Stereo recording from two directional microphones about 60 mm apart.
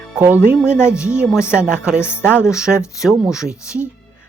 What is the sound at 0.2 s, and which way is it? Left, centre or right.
Speech, right.